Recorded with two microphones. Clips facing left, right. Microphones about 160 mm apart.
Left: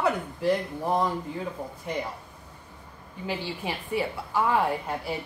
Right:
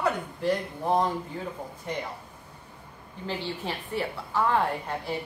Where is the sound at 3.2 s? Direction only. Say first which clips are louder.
Left 1 dB; 10° left (ahead or behind).